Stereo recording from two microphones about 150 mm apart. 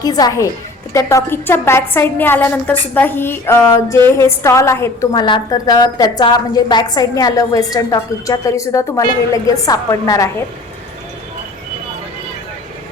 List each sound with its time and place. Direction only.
0.0 s a woman's voice: 25° left (ahead or behind)
5.1 s a woman's voice: 30° left (ahead or behind)